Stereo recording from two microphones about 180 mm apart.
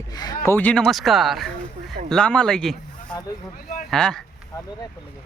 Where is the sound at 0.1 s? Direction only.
20° left (ahead or behind).